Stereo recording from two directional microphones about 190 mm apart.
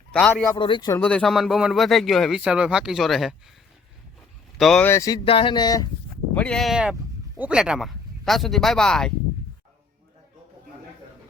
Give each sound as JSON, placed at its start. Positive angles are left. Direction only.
{"t": 0.1, "sound": "speech", "side_deg": 5}
{"t": 0.5, "sound": "a sound", "side_deg": 25}
{"t": 1.0, "sound": "speech", "side_deg": 5}
{"t": 4.5, "sound": "speech", "side_deg": 0}
{"t": 5.2, "sound": "a sound", "side_deg": 30}
{"t": 6.3, "sound": "speech", "side_deg": 5}